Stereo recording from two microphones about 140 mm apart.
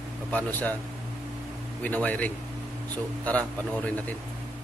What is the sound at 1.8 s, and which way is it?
Speech, 10° left (ahead or behind).